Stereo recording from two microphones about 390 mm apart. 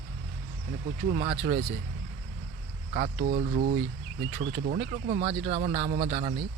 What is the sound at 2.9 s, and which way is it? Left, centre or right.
Speech, centre.